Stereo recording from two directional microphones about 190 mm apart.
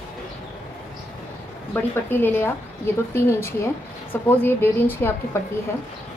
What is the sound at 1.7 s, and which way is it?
Speech, 10° left (ahead or behind).